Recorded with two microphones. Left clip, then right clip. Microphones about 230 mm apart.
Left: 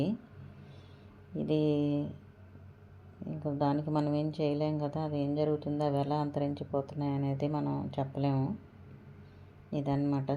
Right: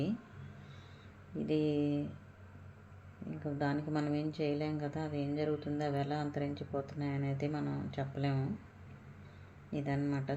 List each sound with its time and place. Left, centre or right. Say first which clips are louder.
1.4 s speech: left 3 dB; left
3.4 s speech: left 5 dB; centre
9.7 s speech: left 4 dB; centre